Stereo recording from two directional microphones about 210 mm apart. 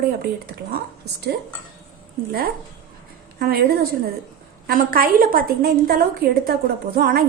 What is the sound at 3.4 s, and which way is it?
A woman's voice, 50° right (ahead or behind).